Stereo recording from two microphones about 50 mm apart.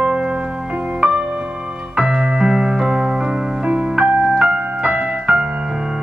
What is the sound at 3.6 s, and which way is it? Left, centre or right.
Music, centre.